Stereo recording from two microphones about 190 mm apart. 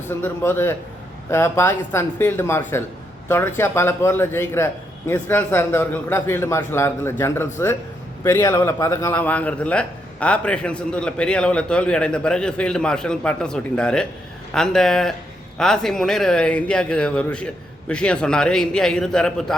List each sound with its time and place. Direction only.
0.1 s a man's voice: 10° left (ahead or behind)